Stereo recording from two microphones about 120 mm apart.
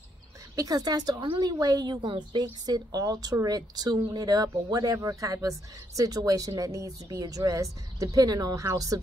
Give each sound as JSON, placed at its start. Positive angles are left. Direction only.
{"t": 0.6, "sound": "speech", "side_deg": -30}
{"t": 1.2, "sound": "a woman's voice", "side_deg": -45}
{"t": 1.6, "sound": "speech", "side_deg": -35}